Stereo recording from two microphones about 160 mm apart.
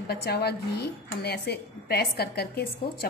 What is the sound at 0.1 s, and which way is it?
A woman's voice, 90° left.